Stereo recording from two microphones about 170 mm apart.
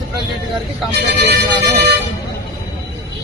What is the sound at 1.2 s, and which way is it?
Music, 75° right (ahead or behind).